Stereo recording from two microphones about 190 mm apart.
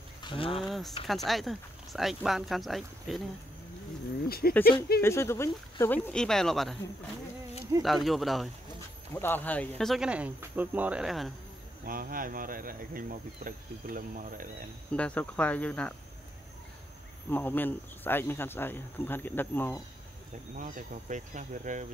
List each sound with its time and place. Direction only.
0.2 s speech: 25° left (ahead or behind)
0.7 s speech: centre (ahead or behind)
4.3 s speech: 55° left (ahead or behind)
5.0 s speech: 15° left (ahead or behind)
6.0 s speech: 5° left (ahead or behind)
7.8 s speech: centre (ahead or behind)
9.1 s speech: 10° left (ahead or behind)
11.8 s insect: 50° right (ahead or behind)
14.9 s speech: 5° left (ahead or behind)
17.3 s speech: 10° left (ahead or behind)
20.5 s speech: 45° right (ahead or behind)